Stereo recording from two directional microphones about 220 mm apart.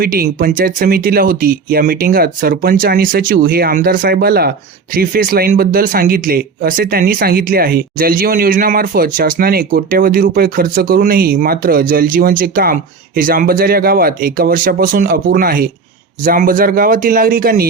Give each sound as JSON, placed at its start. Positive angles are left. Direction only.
{"t": 0.0, "sound": "speech", "side_deg": -40}